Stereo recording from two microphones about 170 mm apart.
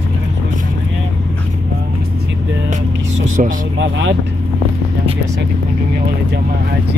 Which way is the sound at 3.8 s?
90° right.